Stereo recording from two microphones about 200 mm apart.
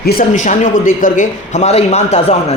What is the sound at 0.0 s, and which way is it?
Speech, 45° left (ahead or behind).